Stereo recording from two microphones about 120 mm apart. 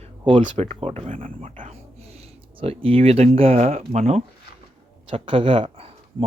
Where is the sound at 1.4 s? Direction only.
85° right.